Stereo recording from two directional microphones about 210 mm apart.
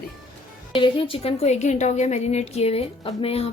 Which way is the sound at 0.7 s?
25° left (ahead or behind).